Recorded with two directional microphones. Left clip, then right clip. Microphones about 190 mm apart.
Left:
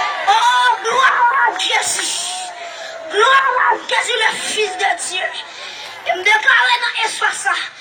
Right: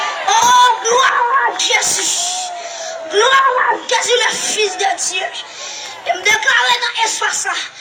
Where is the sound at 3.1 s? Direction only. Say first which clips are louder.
Right 1 dB; 45° right (ahead or behind).